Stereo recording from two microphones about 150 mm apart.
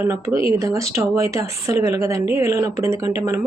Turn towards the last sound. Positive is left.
turn(degrees=-20)  # may be behind; listen again after turning